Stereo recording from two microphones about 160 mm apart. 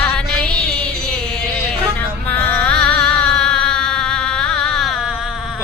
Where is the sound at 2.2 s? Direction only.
10° left (ahead or behind).